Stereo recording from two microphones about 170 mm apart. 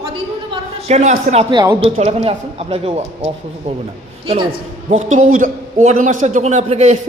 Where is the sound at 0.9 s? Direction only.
40° right (ahead or behind).